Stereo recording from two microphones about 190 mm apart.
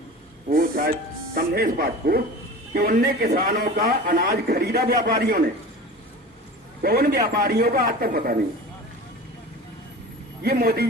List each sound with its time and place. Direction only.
0.4 s a man's voice: 50° right (ahead or behind)
6.8 s a man's voice: 55° right (ahead or behind)
10.4 s a man's voice: 50° right (ahead or behind)